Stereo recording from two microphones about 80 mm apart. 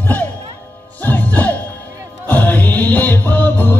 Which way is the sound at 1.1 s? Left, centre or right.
Left.